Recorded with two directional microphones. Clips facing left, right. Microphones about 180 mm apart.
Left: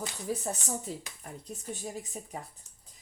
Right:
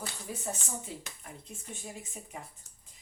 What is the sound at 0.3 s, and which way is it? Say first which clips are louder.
Speech: left 5 dB; 40° left (ahead or behind).